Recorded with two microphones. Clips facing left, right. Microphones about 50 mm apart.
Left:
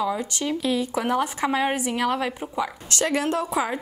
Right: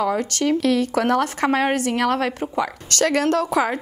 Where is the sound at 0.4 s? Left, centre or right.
Right.